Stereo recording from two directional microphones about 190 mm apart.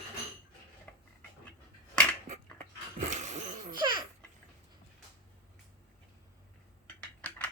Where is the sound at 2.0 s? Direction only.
5° left (ahead or behind).